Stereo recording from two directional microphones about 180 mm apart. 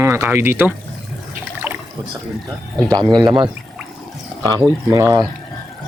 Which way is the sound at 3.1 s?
25° right (ahead or behind).